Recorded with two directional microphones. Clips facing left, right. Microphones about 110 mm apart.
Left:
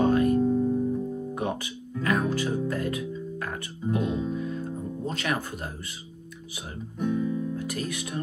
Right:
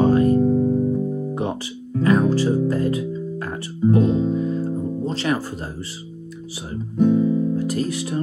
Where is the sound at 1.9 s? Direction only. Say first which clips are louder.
Right 8 dB; 35° right (ahead or behind).